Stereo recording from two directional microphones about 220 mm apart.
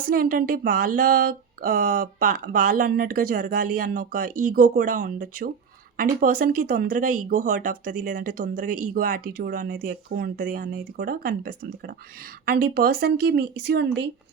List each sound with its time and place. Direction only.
0.0 s speech: 40° right (ahead or behind)